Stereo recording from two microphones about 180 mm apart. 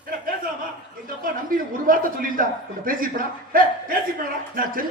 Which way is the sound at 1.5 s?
50° right (ahead or behind).